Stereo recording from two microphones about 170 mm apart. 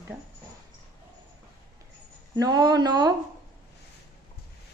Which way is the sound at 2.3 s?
25° right (ahead or behind).